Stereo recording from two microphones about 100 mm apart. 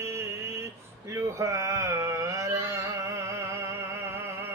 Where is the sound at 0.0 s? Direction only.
30° right (ahead or behind).